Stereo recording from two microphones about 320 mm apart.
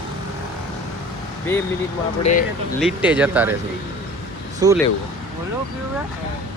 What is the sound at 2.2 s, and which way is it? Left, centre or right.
Speech, left.